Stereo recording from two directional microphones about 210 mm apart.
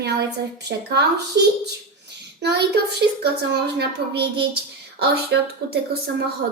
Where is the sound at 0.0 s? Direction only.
55° right (ahead or behind).